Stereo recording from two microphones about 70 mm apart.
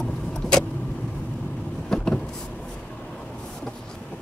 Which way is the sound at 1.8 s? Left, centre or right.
Centre.